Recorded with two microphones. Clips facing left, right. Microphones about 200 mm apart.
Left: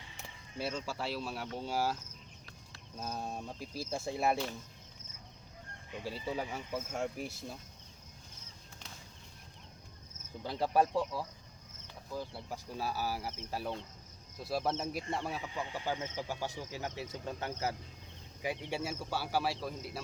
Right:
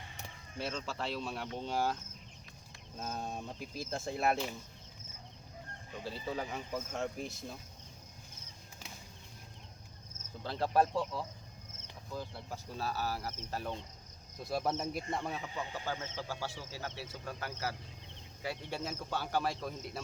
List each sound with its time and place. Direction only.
0.6 s speech: 10° left (ahead or behind)
3.0 s speech: 5° left (ahead or behind)
6.1 s speech: 10° left (ahead or behind)
10.4 s speech: 15° left (ahead or behind)